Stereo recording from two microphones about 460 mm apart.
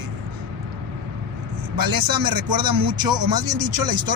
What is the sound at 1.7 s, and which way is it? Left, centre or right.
Speech, right.